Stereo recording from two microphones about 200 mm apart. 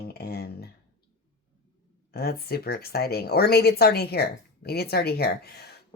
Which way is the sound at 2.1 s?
50° left (ahead or behind).